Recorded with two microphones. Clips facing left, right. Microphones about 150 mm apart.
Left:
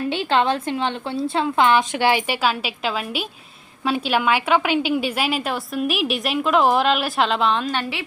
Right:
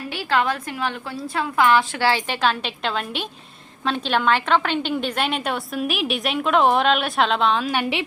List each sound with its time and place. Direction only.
0.1 s a woman's voice: 25° left (ahead or behind); by 7.7 s centre (ahead or behind)
7.7 s a woman's voice: 15° right (ahead or behind)